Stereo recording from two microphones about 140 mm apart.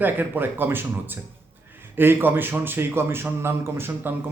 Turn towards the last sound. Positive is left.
turn(degrees=-15)  # may be behind; listen again after turning